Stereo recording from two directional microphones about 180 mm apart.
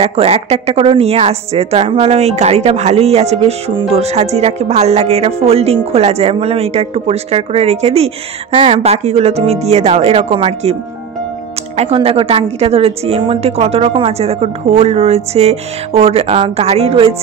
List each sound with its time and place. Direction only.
0.0 s a woman's voice: 35° right (ahead or behind)